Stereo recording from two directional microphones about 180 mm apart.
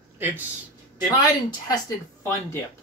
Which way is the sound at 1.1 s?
20° left (ahead or behind).